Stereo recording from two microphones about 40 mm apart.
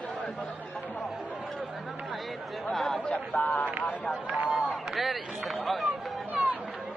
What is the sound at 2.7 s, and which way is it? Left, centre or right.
Chatter, centre.